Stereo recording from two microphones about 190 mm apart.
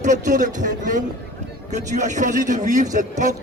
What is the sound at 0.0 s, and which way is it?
A man's voice, 40° right (ahead or behind).